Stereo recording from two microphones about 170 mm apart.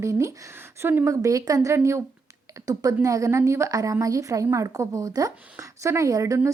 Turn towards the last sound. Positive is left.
turn(degrees=-20)  # may be behind; listen again after turning